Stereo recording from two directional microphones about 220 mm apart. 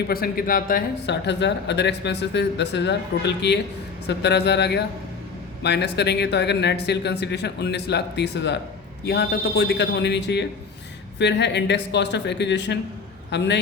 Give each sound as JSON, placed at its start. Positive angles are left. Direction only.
{"t": 0.1, "sound": "speech", "side_deg": 40}